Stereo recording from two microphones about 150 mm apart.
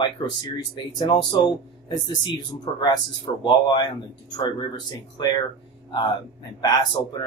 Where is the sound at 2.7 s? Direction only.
30° left (ahead or behind).